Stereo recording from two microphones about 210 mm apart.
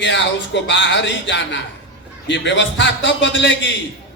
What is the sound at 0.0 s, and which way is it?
A man's voice, 60° left (ahead or behind).